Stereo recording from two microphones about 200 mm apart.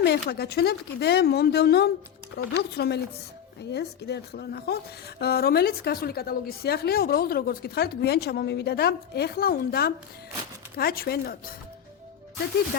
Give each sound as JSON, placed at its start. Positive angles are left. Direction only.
{"t": 0.0, "sound": "a woman's voice", "side_deg": 55}